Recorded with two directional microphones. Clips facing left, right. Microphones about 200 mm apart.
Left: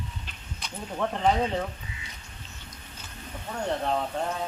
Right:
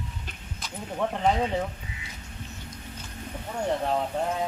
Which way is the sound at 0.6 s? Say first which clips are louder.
Right 1 dB; 5° right (ahead or behind).